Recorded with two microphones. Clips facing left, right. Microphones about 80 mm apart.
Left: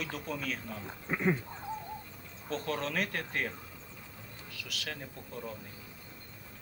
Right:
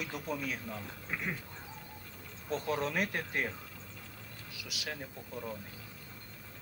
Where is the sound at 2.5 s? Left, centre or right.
Centre.